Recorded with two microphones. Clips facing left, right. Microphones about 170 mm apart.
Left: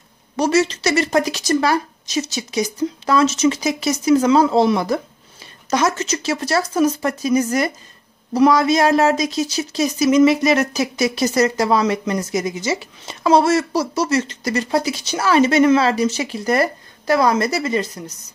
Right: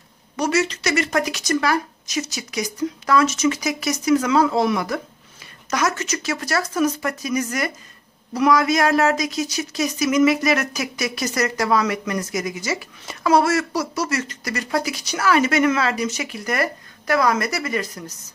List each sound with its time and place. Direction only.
0.4 s a woman's voice: 30° left (ahead or behind)